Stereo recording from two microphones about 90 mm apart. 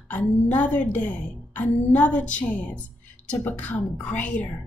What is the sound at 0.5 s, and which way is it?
A woman's voice, 15° left (ahead or behind).